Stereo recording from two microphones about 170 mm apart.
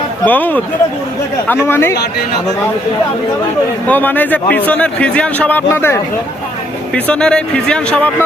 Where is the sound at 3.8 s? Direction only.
10° left (ahead or behind).